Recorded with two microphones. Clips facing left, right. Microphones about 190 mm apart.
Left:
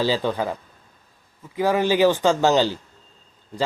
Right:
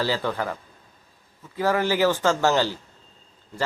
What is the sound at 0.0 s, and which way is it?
Speech, 15° left (ahead or behind).